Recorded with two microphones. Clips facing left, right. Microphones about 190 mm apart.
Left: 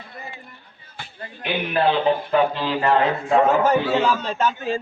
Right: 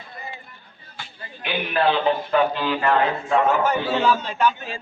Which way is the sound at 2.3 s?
30° left (ahead or behind).